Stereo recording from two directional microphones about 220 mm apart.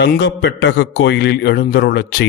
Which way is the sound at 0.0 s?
50° left (ahead or behind).